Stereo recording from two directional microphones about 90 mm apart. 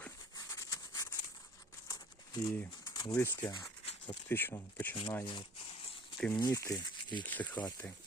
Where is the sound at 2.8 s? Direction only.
45° left (ahead or behind).